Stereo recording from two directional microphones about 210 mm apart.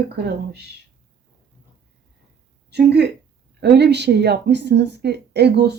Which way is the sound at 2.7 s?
50° right (ahead or behind).